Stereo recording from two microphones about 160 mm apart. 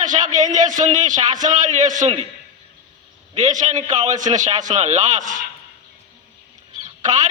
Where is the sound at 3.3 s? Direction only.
50° right (ahead or behind).